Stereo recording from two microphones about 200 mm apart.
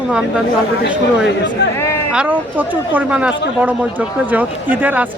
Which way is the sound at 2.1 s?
5° right (ahead or behind).